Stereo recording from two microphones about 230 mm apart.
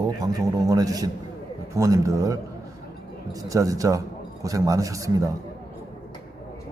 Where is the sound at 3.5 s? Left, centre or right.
Centre.